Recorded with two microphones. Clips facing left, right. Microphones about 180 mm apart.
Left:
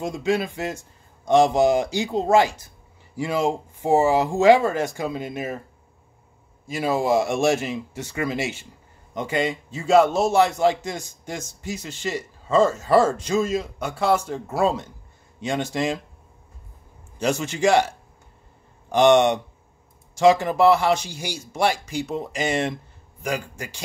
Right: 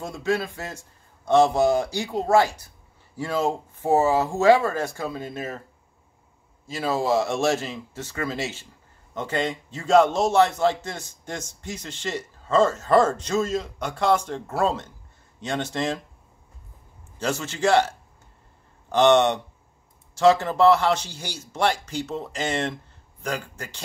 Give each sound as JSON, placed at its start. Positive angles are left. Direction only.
{"t": 0.0, "sound": "a man's voice", "side_deg": 20}
{"t": 6.7, "sound": "a man's voice", "side_deg": 15}
{"t": 17.2, "sound": "a man's voice", "side_deg": 15}